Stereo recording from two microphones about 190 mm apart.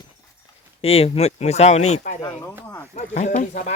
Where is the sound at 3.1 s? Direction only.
45° left (ahead or behind).